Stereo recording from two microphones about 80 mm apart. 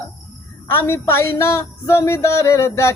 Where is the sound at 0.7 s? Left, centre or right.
Left.